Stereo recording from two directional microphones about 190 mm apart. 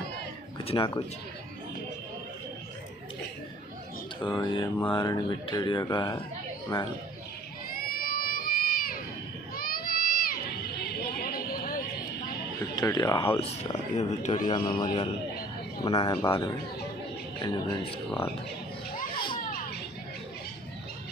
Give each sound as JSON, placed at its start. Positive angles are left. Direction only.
{"t": 0.7, "sound": "speech", "side_deg": 25}
{"t": 4.2, "sound": "speech", "side_deg": 25}
{"t": 7.9, "sound": "crowd", "side_deg": 50}
{"t": 9.6, "sound": "a sound", "side_deg": 50}
{"t": 10.8, "sound": "chatter", "side_deg": 55}
{"t": 12.7, "sound": "speech", "side_deg": 20}
{"t": 13.4, "sound": "speech", "side_deg": 35}
{"t": 14.4, "sound": "speech", "side_deg": 25}
{"t": 19.1, "sound": "children playing", "side_deg": 25}